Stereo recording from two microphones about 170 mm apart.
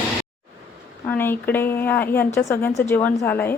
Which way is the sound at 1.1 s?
10° left (ahead or behind).